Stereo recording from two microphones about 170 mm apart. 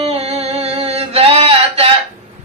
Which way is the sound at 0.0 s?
35° right (ahead or behind).